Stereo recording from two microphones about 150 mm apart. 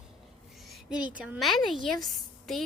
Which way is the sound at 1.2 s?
10° right (ahead or behind).